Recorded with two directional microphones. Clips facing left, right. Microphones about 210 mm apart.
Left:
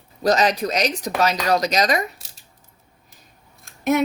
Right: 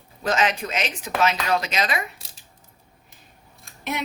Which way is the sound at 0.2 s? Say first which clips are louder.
Left 5 dB; 40° left (ahead or behind).